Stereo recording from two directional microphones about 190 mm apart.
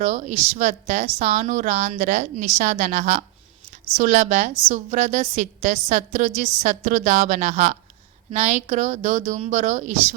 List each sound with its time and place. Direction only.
0.0 s speech: 40° right (ahead or behind)